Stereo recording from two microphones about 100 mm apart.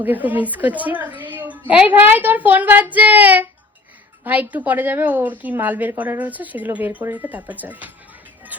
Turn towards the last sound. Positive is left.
turn(degrees=-15)  # may be behind; listen again after turning